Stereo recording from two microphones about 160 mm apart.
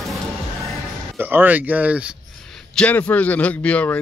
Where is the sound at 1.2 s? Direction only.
10° right (ahead or behind).